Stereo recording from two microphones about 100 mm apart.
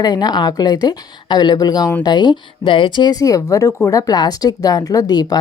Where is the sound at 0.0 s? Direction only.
45° left (ahead or behind).